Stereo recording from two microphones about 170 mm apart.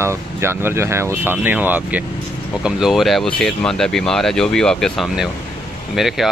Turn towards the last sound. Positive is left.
turn(degrees=0)  # may be behind; listen again after turning